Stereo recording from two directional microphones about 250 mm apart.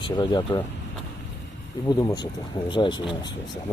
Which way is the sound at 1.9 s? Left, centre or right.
Centre.